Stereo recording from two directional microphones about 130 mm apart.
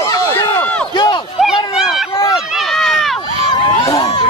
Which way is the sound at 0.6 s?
10° left (ahead or behind).